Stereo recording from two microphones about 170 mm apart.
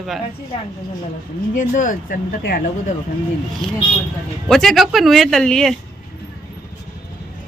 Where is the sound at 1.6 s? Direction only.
50° left (ahead or behind).